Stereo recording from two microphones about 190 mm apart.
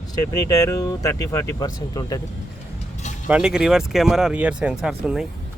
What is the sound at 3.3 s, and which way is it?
Speech, 5° right (ahead or behind).